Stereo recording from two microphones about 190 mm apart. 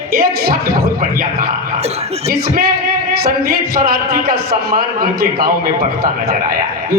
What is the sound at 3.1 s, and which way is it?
A man's voice, 55° right (ahead or behind).